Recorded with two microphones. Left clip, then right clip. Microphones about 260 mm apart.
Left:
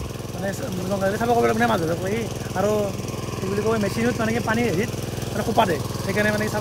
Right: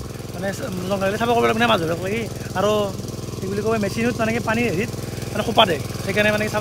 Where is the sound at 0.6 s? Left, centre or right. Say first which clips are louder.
Right 1 dB; centre.